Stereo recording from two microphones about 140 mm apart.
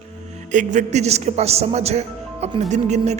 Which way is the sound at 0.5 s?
55° right (ahead or behind).